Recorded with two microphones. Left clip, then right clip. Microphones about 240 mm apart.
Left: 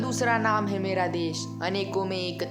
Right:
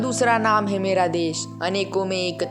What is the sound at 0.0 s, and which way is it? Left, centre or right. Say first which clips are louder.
Speech: right 6 dB; centre.